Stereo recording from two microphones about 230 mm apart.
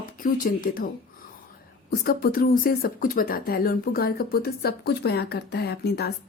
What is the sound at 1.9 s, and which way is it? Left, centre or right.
Speech, left.